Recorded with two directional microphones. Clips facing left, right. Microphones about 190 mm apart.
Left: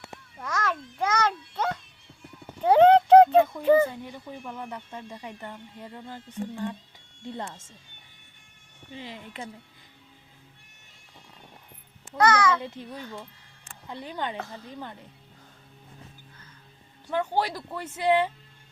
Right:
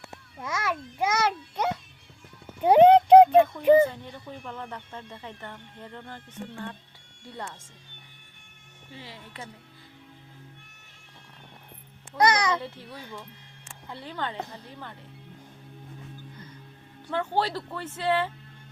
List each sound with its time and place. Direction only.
0.3 s a sound: 10° right (ahead or behind)
2.6 s clip-clop: 15° right (ahead or behind)
3.6 s a sound: 15° right (ahead or behind)
3.8 s speech: 10° left (ahead or behind)
8.9 s speech: 20° left (ahead or behind)
12.1 s a child's voice: 15° right (ahead or behind)
12.6 s speech: 15° left (ahead or behind)
17.1 s speech: 15° left (ahead or behind)